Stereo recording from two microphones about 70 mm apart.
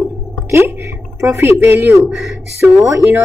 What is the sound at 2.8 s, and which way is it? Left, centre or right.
Speech, right.